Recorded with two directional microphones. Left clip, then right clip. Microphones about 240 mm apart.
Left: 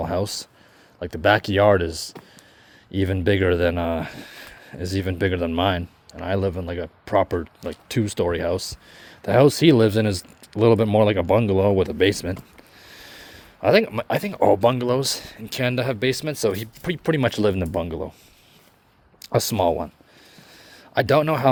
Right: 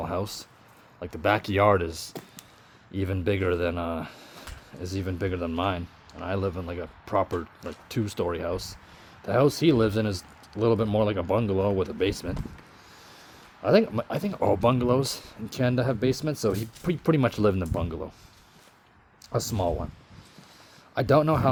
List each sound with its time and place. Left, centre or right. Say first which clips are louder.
0.0 s speech: left 6 dB; left
13.6 s speech: left 4 dB; left
19.3 s speech: left 8 dB; left
20.9 s speech: left 3 dB; left